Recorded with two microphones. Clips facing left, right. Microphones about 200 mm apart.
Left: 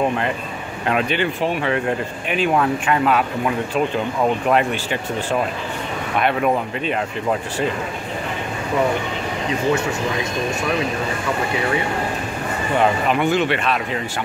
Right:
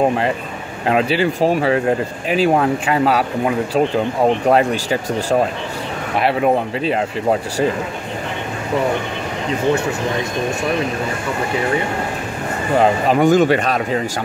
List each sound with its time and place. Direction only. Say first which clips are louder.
0.8 s speech: right 4 dB; 30° right (ahead or behind)
6.1 s speech: right 3 dB; 30° right (ahead or behind)
12.7 s speech: right 4 dB; 35° right (ahead or behind)